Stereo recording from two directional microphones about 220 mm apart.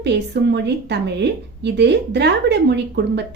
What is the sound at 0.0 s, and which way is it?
A woman's voice, 50° right (ahead or behind).